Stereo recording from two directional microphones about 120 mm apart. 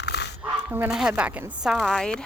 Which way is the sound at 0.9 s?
5° right (ahead or behind).